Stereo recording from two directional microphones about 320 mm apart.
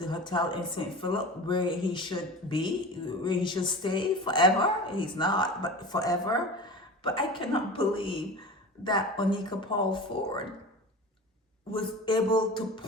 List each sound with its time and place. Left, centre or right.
0.0 s speech: centre
11.7 s speech: centre